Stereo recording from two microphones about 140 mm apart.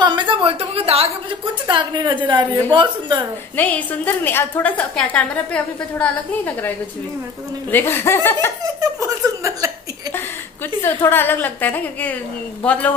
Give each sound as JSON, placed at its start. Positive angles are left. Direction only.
{"t": 0.0, "sound": "a sound", "side_deg": -35}
{"t": 1.7, "sound": "a woman's voice", "side_deg": -35}
{"t": 3.5, "sound": "a woman's voice", "side_deg": 10}
{"t": 7.7, "sound": "a woman's voice", "side_deg": 15}
{"t": 9.0, "sound": "speech", "side_deg": -25}
{"t": 10.8, "sound": "a woman's voice", "side_deg": 15}